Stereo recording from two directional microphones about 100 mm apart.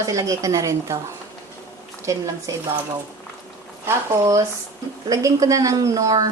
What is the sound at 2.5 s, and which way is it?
Speech, 35° right (ahead or behind).